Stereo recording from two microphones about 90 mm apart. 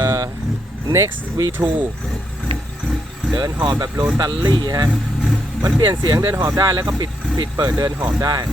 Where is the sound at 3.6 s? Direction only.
50° right (ahead or behind).